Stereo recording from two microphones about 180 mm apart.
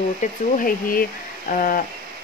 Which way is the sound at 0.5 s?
50° left (ahead or behind).